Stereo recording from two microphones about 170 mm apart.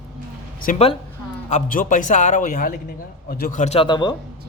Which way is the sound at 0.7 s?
50° left (ahead or behind).